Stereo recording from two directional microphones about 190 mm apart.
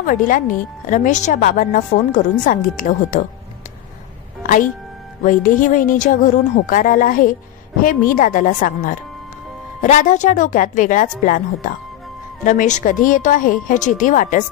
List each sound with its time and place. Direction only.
0.0 s a woman's voice: 45° left (ahead or behind)
5.2 s a woman's voice: 45° left (ahead or behind)